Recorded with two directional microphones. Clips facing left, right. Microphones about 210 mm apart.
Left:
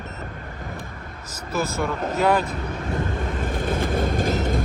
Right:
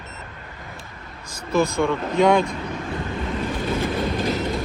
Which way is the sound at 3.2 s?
50° left (ahead or behind).